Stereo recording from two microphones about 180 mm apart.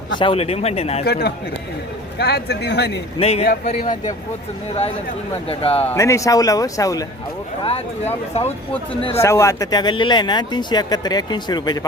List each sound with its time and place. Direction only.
0.2 s speech: 30° left (ahead or behind)
1.0 s a man's voice: 60° left (ahead or behind)
3.2 s speech: 35° left (ahead or behind)
3.8 s speech: 45° left (ahead or behind)
5.5 s speech: 30° left (ahead or behind)
5.9 s speech: 15° left (ahead or behind)
7.6 s speech: 35° left (ahead or behind)
9.1 s speech: 15° left (ahead or behind)